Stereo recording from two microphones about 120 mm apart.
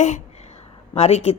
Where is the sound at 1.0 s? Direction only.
60° left (ahead or behind).